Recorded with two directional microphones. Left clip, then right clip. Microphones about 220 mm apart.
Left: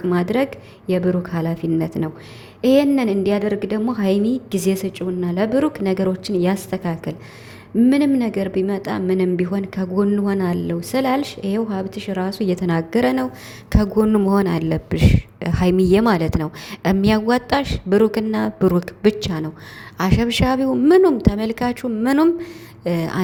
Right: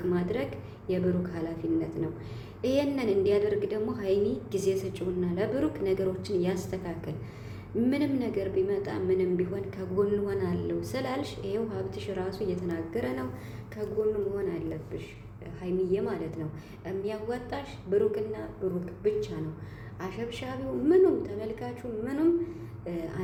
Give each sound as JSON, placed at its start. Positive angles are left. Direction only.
{"t": 0.1, "sound": "a woman's voice", "side_deg": 40}